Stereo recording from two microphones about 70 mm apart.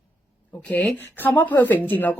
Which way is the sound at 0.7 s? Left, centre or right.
Left.